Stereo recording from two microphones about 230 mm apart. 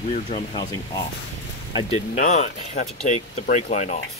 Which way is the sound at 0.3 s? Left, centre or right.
Centre.